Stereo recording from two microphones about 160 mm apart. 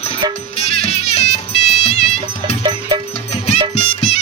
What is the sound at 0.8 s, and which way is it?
Music, 40° left (ahead or behind).